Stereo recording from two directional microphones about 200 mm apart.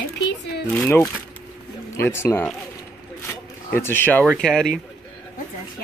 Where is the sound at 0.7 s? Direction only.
10° left (ahead or behind).